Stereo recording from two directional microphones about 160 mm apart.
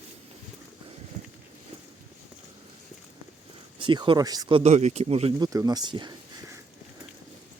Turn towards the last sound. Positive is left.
turn(degrees=-30)  # may be behind; listen again after turning